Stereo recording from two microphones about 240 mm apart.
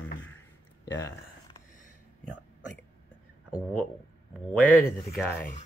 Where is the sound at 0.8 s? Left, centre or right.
Centre.